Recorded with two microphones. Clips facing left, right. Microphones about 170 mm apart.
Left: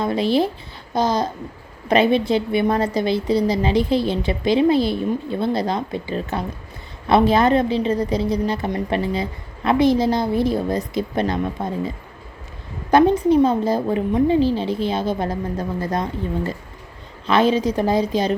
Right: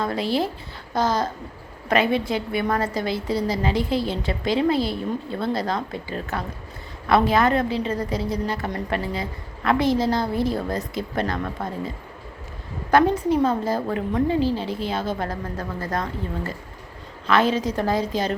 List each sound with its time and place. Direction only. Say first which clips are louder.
0.0 s a woman's voice: left 5 dB; 20° left (ahead or behind)
12.9 s a woman's voice: left 4 dB; 20° left (ahead or behind)
17.2 s a woman's voice: left 3 dB; 15° left (ahead or behind)